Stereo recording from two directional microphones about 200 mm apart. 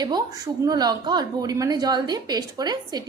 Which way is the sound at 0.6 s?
20° right (ahead or behind).